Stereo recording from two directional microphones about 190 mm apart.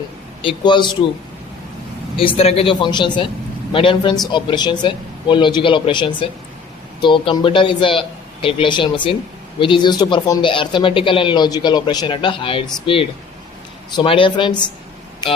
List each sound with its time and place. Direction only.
0.4 s speech: 25° left (ahead or behind)
2.1 s speech: 30° left (ahead or behind)